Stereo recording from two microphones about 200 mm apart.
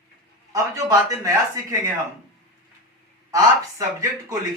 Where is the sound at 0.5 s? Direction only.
15° right (ahead or behind).